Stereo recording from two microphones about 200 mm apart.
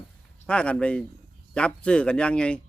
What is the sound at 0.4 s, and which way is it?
Speech, 5° left (ahead or behind).